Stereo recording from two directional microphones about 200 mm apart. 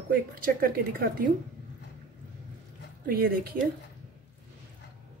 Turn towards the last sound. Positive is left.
turn(degrees=-45)  # may be behind; listen again after turning